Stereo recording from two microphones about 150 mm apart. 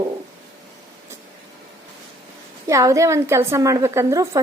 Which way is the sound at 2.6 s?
20° right (ahead or behind).